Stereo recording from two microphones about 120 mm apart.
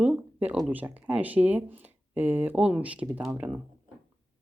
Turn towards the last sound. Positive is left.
turn(degrees=-10)  # may be behind; listen again after turning